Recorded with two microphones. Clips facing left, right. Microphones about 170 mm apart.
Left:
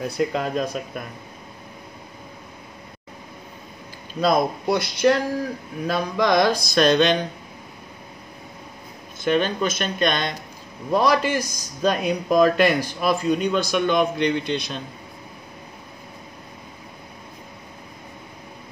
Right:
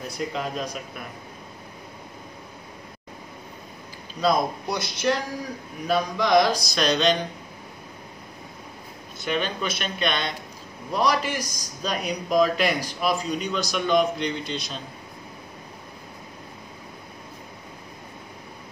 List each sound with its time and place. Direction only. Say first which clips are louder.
0.2 s a man's voice: left 6 dB; 55° left (ahead or behind)
4.2 s a man's voice: left 3 dB; 60° left (ahead or behind)
9.2 s speech: left 6 dB; 50° left (ahead or behind)
10.9 s a man's voice: left 4 dB; 55° left (ahead or behind)